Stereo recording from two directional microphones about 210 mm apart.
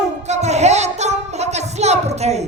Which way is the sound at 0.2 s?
30° right (ahead or behind).